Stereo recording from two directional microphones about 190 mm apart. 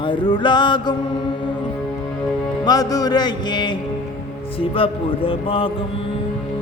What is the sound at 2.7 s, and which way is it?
Music, 20° left (ahead or behind).